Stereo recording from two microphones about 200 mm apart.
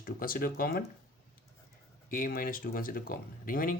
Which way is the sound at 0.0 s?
45° left (ahead or behind).